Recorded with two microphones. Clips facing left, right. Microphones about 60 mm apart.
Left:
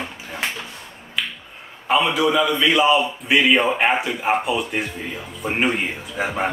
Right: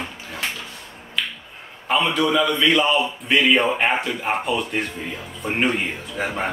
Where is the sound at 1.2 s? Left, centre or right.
Centre.